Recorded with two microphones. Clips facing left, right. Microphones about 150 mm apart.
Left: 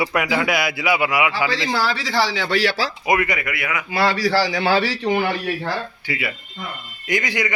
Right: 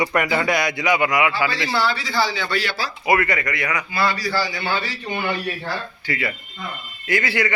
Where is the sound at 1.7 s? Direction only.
90° left.